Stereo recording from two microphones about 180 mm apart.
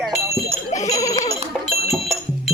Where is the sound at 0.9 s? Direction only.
20° left (ahead or behind).